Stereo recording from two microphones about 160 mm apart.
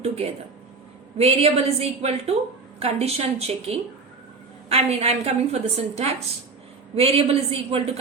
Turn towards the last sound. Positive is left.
turn(degrees=-40)  # may be behind; listen again after turning